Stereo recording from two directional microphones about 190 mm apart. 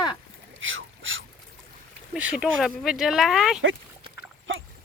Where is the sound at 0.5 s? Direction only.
90° right.